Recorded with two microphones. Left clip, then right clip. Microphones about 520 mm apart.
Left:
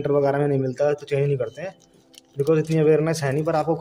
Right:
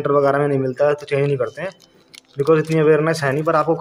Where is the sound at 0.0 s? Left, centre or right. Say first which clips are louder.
Right 4 dB; left.